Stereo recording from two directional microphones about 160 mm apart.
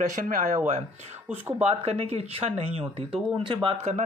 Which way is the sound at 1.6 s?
40° right (ahead or behind).